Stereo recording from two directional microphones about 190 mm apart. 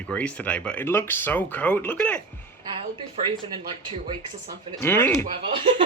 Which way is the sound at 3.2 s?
25° right (ahead or behind).